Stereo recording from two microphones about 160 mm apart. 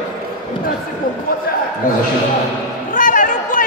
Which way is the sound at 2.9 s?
55° left (ahead or behind).